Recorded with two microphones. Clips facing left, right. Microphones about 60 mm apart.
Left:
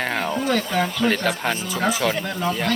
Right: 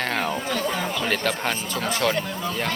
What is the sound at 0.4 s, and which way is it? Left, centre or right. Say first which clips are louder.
Speech: left 4 dB; left.